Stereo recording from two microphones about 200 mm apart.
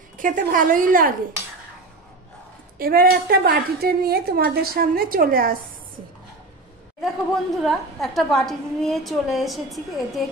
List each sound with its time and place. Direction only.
0.2 s a woman's voice: 40° right (ahead or behind)
2.8 s a woman's voice: 50° right (ahead or behind)
7.0 s a woman's voice: centre (ahead or behind)